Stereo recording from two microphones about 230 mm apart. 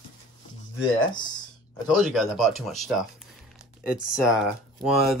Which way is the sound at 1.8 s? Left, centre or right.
Centre.